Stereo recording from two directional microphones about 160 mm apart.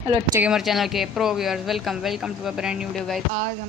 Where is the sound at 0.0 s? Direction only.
5° right (ahead or behind).